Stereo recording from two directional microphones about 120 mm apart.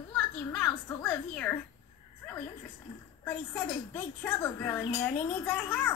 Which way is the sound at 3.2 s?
15° left (ahead or behind).